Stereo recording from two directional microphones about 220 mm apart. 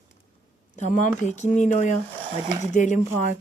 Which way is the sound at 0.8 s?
35° left (ahead or behind).